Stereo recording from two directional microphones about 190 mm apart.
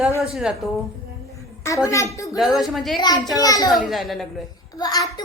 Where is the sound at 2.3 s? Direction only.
Centre (ahead or behind).